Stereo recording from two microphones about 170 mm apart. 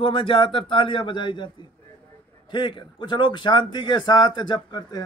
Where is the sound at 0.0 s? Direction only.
30° left (ahead or behind).